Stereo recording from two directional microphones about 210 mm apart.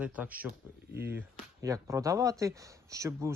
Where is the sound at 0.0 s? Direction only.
5° right (ahead or behind).